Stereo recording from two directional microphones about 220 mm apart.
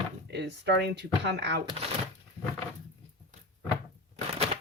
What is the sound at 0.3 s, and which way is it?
A woman's voice, 50° right (ahead or behind).